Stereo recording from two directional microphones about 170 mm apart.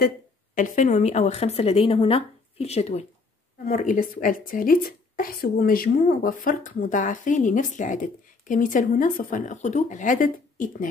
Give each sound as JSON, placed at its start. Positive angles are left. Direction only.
{"t": 0.6, "sound": "speech", "side_deg": 50}
{"t": 3.6, "sound": "a woman's voice", "side_deg": 50}